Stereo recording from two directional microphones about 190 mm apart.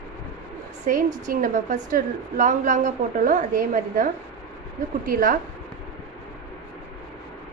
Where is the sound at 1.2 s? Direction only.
45° right (ahead or behind).